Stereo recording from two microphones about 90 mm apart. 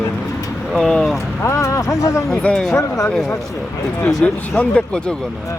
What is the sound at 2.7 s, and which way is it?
Speech, 35° left (ahead or behind).